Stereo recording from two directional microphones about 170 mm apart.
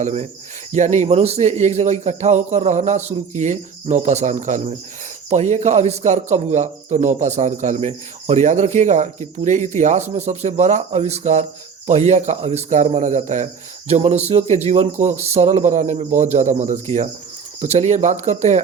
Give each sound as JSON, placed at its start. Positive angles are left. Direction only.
{"t": 0.0, "sound": "a man's voice", "side_deg": -45}